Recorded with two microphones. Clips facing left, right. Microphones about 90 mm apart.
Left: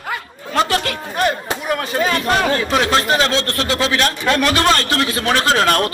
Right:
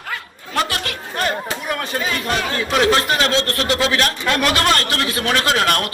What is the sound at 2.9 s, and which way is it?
A man's voice, 30° left (ahead or behind).